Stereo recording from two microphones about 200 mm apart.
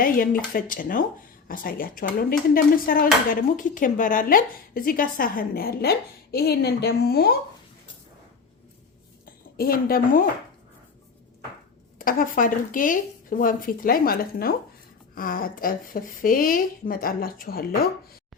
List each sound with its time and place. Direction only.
0.0 s speech: 45° left (ahead or behind)
9.2 s a woman's voice: 45° left (ahead or behind)
11.9 s speech: 45° left (ahead or behind)